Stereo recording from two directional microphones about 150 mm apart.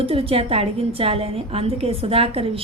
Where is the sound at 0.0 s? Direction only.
40° right (ahead or behind).